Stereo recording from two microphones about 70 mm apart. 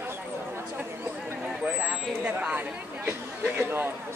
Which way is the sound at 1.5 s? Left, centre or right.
Centre.